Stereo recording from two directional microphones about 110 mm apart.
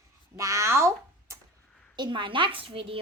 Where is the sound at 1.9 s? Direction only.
45° right (ahead or behind).